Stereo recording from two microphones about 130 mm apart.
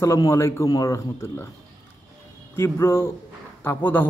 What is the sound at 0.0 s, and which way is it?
A man's voice, 20° left (ahead or behind).